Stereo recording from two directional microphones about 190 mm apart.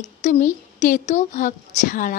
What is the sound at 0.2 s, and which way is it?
A woman's voice, 40° left (ahead or behind).